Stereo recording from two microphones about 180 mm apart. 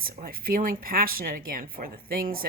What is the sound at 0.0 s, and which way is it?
Speech, 55° right (ahead or behind).